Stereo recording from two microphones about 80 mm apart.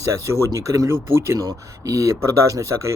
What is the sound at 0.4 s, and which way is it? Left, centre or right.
Speech, right.